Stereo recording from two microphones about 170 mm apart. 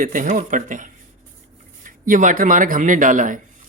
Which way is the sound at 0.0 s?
55° right (ahead or behind).